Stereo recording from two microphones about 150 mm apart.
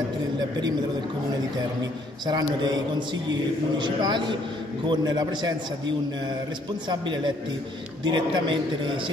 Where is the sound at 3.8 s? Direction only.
30° right (ahead or behind).